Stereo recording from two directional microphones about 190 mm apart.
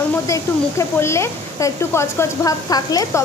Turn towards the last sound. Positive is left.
turn(degrees=20)  # may be behind; listen again after turning